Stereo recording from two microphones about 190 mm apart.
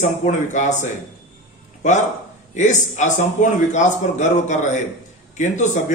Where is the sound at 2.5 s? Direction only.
40° left (ahead or behind).